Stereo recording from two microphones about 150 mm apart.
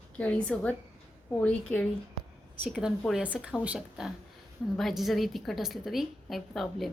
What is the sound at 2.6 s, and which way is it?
A woman's voice, 5° right (ahead or behind).